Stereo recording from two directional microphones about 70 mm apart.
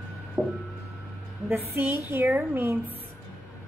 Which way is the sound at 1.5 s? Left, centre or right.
Right.